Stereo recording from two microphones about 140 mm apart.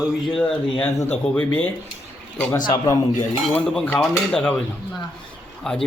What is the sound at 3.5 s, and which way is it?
Speech, 5° left (ahead or behind).